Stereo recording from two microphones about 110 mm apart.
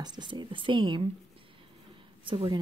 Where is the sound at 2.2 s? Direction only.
55° right (ahead or behind).